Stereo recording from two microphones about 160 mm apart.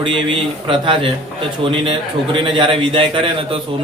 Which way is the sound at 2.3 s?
30° right (ahead or behind).